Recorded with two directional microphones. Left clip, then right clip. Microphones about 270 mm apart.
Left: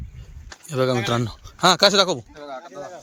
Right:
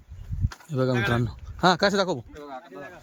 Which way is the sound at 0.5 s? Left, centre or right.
Centre.